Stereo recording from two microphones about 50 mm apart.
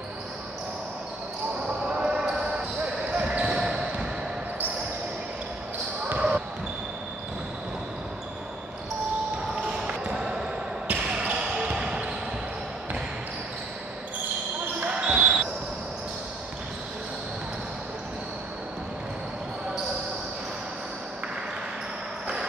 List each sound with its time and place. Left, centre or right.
1.9 s basketball bounce: centre
6.1 s basketball bounce: right
9.6 s basketball bounce: right
14.8 s basketball bounce: right